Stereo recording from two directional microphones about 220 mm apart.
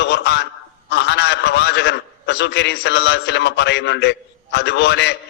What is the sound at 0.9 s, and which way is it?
A man's voice, 50° left (ahead or behind).